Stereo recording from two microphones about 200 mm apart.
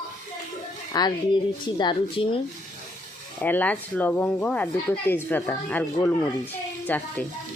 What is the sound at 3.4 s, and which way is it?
Speech, 10° left (ahead or behind).